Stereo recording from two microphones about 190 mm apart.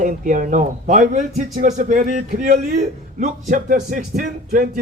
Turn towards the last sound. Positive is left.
turn(degrees=-45)  # may be behind; listen again after turning